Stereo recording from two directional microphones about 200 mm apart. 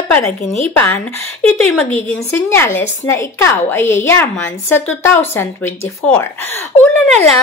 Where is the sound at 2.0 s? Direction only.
10° left (ahead or behind).